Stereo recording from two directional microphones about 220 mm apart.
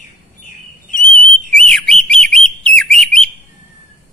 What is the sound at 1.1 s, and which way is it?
Whistle, 35° left (ahead or behind).